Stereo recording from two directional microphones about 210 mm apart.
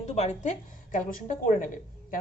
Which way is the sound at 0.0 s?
30° left (ahead or behind).